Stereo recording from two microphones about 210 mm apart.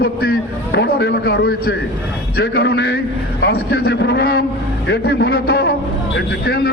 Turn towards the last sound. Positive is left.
turn(degrees=50)  # may be behind; listen again after turning